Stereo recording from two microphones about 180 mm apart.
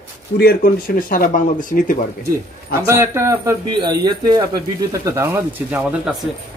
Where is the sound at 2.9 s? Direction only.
15° right (ahead or behind).